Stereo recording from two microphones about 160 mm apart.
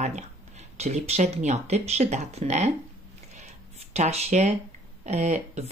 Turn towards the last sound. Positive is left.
turn(degrees=-45)  # may be behind; listen again after turning